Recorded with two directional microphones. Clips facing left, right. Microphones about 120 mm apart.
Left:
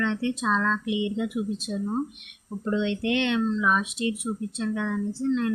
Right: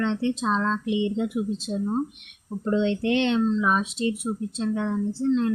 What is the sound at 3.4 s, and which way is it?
Speech, 20° right (ahead or behind).